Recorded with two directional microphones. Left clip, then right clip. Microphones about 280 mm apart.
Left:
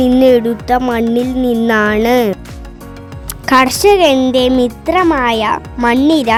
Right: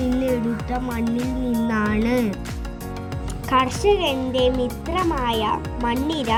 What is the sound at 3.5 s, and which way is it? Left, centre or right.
A child's voice, left.